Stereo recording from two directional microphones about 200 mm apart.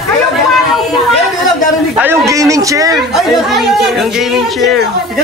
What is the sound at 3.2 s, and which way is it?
Speech, centre (ahead or behind).